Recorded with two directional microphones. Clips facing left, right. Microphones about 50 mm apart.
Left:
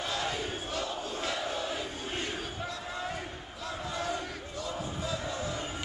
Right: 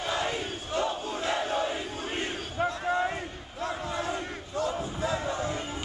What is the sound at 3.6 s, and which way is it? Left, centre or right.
Battle cry, right.